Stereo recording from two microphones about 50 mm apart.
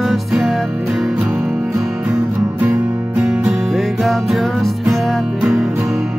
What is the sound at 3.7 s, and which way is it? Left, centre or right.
Music, centre.